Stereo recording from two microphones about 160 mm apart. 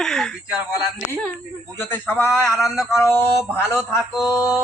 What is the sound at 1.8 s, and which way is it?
Speech, 10° left (ahead or behind).